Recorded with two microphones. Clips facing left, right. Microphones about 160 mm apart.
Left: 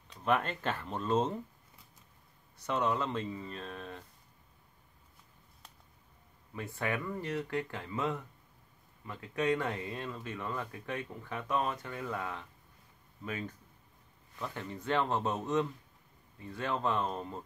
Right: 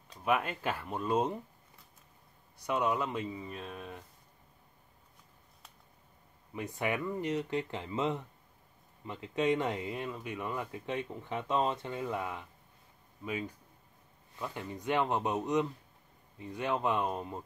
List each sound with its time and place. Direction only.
0.2 s speech: 10° right (ahead or behind)
2.6 s speech: 10° right (ahead or behind)
6.5 s speech: 15° right (ahead or behind)